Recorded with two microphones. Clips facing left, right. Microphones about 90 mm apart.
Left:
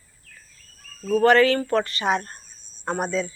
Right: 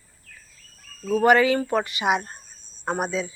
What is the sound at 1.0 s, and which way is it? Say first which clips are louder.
A woman's voice: left 1 dB; 10° right (ahead or behind).